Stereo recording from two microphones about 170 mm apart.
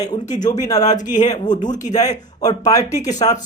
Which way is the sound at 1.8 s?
20° left (ahead or behind).